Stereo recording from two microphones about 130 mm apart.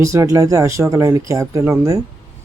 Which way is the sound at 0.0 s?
25° right (ahead or behind).